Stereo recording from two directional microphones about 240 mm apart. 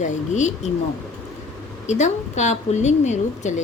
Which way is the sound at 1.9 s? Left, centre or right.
Left.